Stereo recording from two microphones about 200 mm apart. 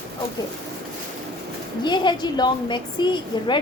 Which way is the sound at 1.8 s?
20° left (ahead or behind).